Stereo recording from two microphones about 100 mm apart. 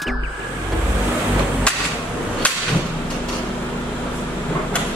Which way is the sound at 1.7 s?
10° left (ahead or behind).